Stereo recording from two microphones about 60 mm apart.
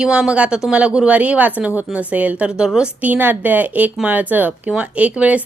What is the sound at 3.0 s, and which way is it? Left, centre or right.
A woman's voice, right.